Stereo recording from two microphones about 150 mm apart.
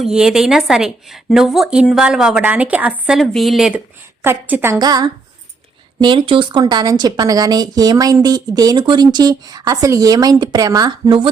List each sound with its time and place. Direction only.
0.0 s a woman's voice: 5° right (ahead or behind)
4.2 s a woman's voice: 15° right (ahead or behind)
4.8 s a woman's voice: 25° right (ahead or behind)